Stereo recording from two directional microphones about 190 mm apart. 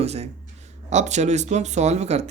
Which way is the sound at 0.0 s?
35° right (ahead or behind).